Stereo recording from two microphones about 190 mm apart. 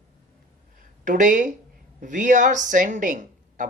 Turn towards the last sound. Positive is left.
turn(degrees=-45)  # may be behind; listen again after turning